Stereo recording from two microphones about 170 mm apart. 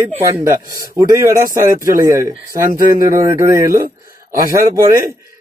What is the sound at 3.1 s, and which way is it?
Speech, 20° right (ahead or behind).